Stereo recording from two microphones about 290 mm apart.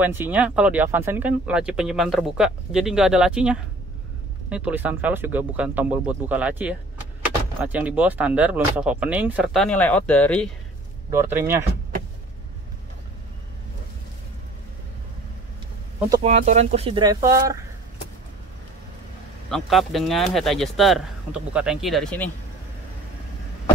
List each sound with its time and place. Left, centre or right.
0.0 s speech: centre
11.1 s speech: centre
16.2 s speech: right
19.5 s speech: centre